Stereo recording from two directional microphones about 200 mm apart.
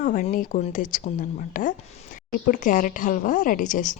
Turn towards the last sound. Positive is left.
turn(degrees=40)  # may be behind; listen again after turning